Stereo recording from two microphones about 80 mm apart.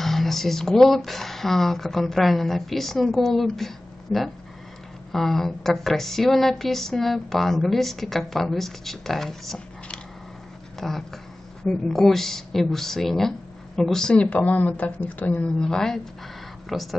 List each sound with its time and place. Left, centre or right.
0.0 s a woman's voice: centre
15.6 s speech: centre